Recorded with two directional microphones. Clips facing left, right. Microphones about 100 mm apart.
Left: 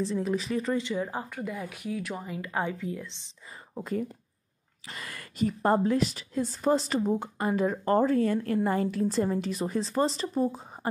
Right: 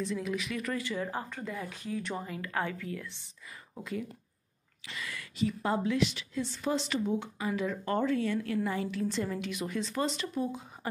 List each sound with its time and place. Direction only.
0.0 s speech: 35° left (ahead or behind); by 3.3 s 20° left (ahead or behind)
3.8 s a woman's voice: 40° left (ahead or behind)